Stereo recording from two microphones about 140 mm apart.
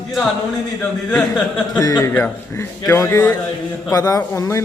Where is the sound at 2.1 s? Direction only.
10° left (ahead or behind).